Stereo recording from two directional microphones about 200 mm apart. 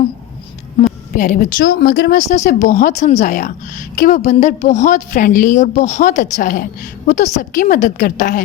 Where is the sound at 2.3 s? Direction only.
40° left (ahead or behind).